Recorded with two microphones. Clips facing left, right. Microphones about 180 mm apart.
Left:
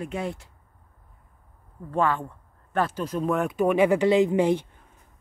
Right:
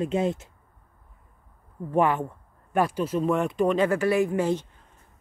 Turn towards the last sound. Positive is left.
turn(degrees=15)  # may be behind; listen again after turning